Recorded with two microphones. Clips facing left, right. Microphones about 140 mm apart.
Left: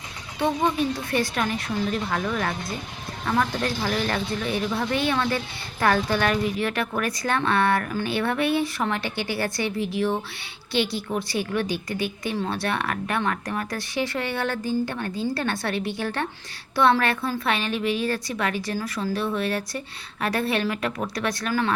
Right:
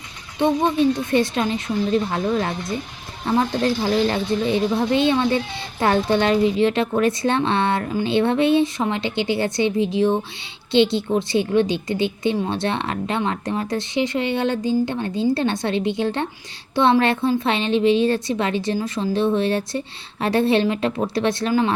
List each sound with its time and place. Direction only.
0.3 s a woman's voice: 20° right (ahead or behind)